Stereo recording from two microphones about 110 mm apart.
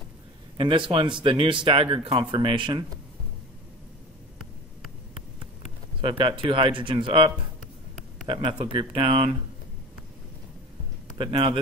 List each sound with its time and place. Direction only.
0.6 s speech: 50° right (ahead or behind)
5.9 s speech: 50° right (ahead or behind)
11.1 s speech: 55° right (ahead or behind)